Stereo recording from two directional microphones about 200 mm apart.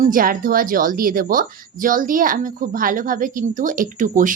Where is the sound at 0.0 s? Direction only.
45° right (ahead or behind).